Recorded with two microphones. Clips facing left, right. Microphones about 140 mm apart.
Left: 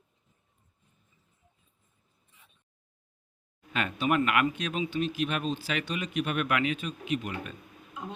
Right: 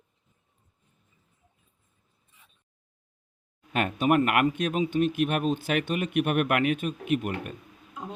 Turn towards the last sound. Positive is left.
turn(degrees=-50)  # may be behind; listen again after turning